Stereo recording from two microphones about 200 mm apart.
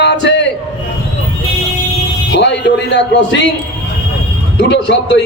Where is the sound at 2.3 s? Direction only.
60° left (ahead or behind).